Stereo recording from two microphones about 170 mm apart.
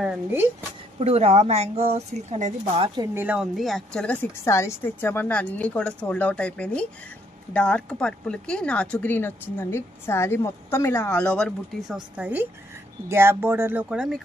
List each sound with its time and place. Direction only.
0.0 s speech: 10° right (ahead or behind)
1.0 s speech: 40° right (ahead or behind)
3.2 s speech: 5° right (ahead or behind)
12.2 s speech: 10° right (ahead or behind)